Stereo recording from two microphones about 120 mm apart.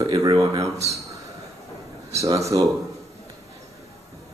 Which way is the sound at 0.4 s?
30° right (ahead or behind).